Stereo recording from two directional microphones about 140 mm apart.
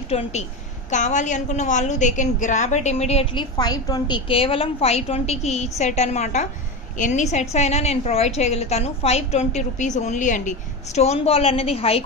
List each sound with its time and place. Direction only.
0.1 s a woman's voice: 50° left (ahead or behind); by 4.2 s 30° left (ahead or behind)
4.3 s a woman's voice: 40° left (ahead or behind)